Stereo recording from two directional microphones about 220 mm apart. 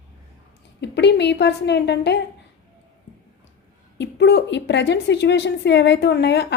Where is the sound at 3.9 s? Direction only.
50° left (ahead or behind).